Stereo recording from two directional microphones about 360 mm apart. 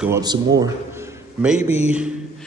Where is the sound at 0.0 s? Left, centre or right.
Centre.